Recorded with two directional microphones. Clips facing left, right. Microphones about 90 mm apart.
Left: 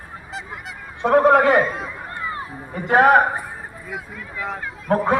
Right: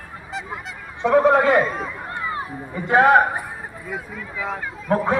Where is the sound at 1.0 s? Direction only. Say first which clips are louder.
Left 1 dB; 50° left (ahead or behind).